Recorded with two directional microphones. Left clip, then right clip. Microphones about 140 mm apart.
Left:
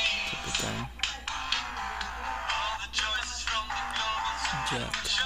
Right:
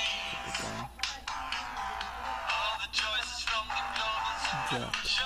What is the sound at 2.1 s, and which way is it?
Music, 20° right (ahead or behind).